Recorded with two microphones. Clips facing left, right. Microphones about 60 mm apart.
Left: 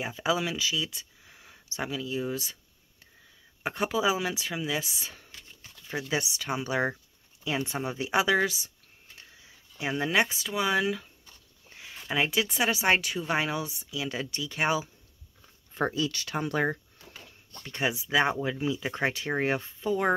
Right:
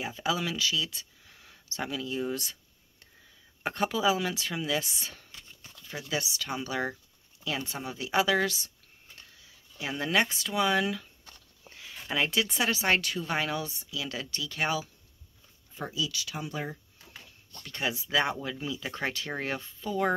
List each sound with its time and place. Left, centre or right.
0.2 s speech: centre
3.6 s speech: centre
5.9 s speech: left
9.3 s a sound: left
10.0 s speech: centre
11.7 s speech: left
15.9 s speech: left
17.6 s speech: left